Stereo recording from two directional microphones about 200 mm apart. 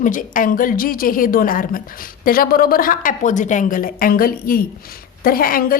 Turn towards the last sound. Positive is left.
turn(degrees=45)  # may be behind; listen again after turning